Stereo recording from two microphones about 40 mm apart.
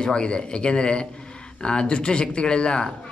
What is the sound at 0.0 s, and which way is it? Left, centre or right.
A man's voice, left.